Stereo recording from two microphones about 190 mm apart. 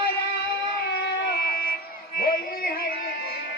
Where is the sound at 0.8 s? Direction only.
60° left (ahead or behind).